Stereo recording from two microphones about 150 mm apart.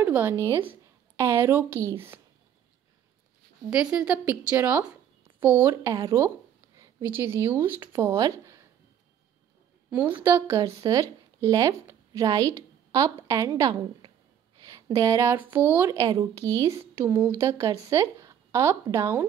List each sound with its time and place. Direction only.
0.0 s a sound: 15° right (ahead or behind)
0.5 s a woman's voice: 15° right (ahead or behind)
3.7 s speech: 10° right (ahead or behind)
9.8 s a woman's voice: 10° right (ahead or behind)